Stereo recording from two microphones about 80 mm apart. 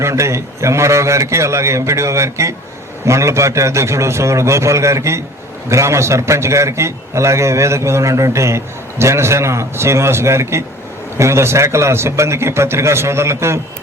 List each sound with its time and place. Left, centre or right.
0.0 s a man's voice: right